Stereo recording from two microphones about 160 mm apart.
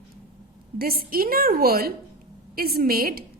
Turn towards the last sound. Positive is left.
turn(degrees=-70)  # may be behind; listen again after turning